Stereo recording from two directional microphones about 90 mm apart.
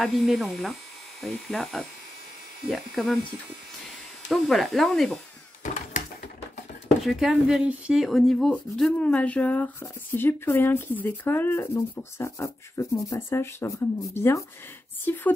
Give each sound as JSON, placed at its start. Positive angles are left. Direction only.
{"t": 0.0, "sound": "speech", "side_deg": 0}
{"t": 4.3, "sound": "speech", "side_deg": 0}
{"t": 7.0, "sound": "speech", "side_deg": -5}